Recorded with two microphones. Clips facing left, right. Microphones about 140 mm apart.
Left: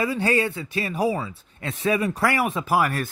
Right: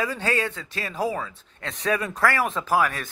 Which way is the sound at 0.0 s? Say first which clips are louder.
Left 3 dB; 10° left (ahead or behind).